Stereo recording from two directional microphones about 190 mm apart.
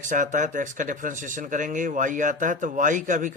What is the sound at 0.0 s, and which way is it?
Speech, 40° right (ahead or behind).